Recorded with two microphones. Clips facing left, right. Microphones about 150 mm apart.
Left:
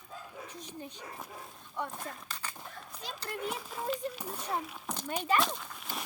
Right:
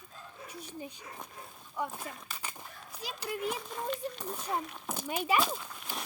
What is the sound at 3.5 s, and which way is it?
Speech, 5° left (ahead or behind).